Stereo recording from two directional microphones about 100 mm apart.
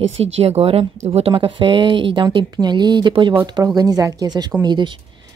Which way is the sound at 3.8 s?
40° right (ahead or behind).